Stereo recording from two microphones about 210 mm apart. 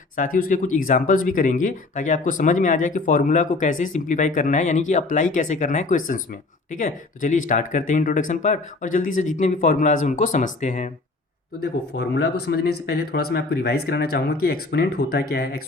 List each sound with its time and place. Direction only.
0.2 s speech: 40° left (ahead or behind)
11.6 s speech: 55° left (ahead or behind)